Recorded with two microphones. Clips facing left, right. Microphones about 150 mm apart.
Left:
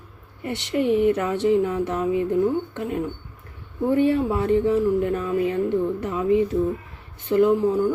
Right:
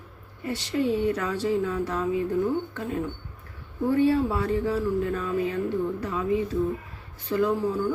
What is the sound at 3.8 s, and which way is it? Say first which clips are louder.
Speech: left 2 dB; 20° left (ahead or behind).